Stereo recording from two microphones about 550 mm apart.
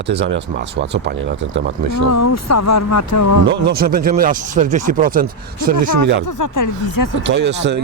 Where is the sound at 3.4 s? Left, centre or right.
Centre.